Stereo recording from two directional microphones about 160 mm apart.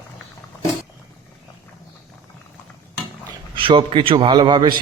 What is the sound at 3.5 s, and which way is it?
A man's voice, 35° right (ahead or behind).